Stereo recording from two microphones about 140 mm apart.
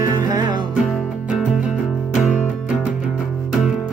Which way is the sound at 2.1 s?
60° left (ahead or behind).